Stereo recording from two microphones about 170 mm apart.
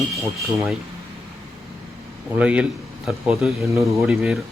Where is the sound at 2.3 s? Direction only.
5° right (ahead or behind).